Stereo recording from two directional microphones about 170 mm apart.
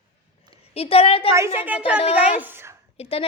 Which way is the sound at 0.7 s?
35° left (ahead or behind).